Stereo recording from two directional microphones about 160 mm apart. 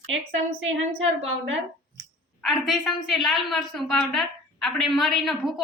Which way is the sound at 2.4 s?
Centre (ahead or behind).